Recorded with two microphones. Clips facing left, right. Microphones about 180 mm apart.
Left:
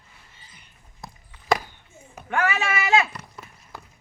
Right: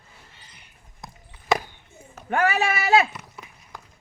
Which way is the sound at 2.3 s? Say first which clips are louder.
Right 2 dB; 35° right (ahead or behind).